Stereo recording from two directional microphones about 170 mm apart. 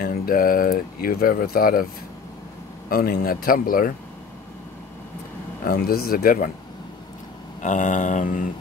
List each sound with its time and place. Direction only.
0.0 s speech: 55° left (ahead or behind)
2.9 s speech: 60° left (ahead or behind)
5.7 s speech: 60° left (ahead or behind)
7.6 s a sound: 45° left (ahead or behind)